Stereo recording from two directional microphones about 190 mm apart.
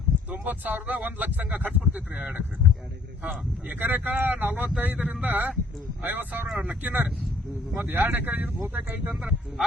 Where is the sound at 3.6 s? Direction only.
10° right (ahead or behind).